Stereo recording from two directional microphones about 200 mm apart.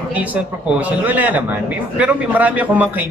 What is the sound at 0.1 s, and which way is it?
Speech, 5° right (ahead or behind).